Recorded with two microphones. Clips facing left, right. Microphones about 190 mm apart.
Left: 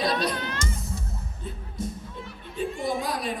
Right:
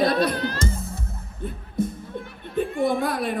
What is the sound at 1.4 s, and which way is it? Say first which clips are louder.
Music: right 8 dB; 55° right (ahead or behind).